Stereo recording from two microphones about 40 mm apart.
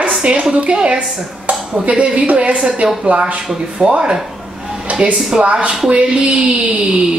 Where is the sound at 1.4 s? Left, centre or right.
Right.